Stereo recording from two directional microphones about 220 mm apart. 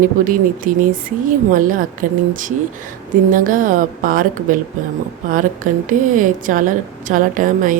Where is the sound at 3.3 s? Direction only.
40° right (ahead or behind).